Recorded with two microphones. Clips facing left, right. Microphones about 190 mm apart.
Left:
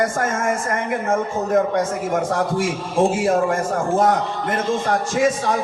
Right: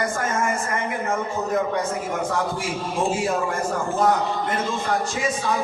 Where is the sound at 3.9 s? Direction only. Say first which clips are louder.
Left 1 dB; 45° left (ahead or behind).